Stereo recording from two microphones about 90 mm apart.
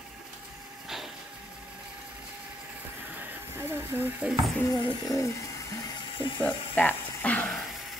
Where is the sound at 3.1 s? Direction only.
20° right (ahead or behind).